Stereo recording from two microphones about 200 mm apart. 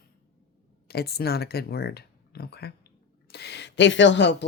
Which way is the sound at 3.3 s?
55° left (ahead or behind).